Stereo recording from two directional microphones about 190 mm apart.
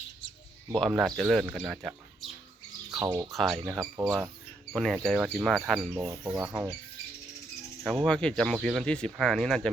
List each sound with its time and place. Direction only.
0.7 s speech: centre (ahead or behind)
2.9 s speech: 15° right (ahead or behind)
3.3 s speech: centre (ahead or behind)
6.1 s speech: 15° right (ahead or behind)
6.5 s speech: centre (ahead or behind)
7.9 s speech: centre (ahead or behind)